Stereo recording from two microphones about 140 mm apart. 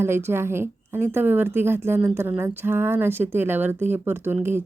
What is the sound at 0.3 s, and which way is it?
A woman's voice, 15° right (ahead or behind).